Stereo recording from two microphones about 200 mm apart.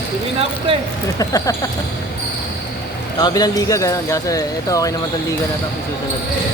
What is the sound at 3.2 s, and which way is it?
Speech, 20° left (ahead or behind).